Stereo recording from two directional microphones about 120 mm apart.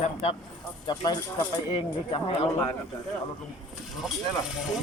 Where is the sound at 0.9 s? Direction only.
35° left (ahead or behind).